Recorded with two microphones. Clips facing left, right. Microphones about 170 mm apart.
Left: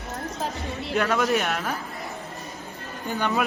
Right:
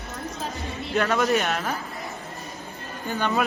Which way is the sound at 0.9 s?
5° left (ahead or behind).